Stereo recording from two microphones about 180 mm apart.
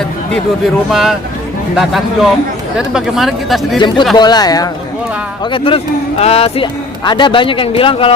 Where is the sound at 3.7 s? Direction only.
25° left (ahead or behind).